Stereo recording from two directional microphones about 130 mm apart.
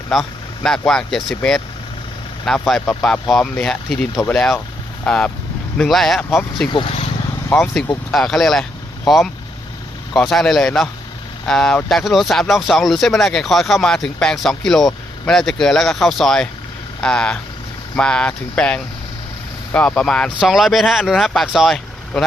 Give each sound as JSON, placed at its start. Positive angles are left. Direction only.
{"t": 0.1, "sound": "speech", "side_deg": 0}
{"t": 6.7, "sound": "speech", "side_deg": 40}
{"t": 8.1, "sound": "speech", "side_deg": 5}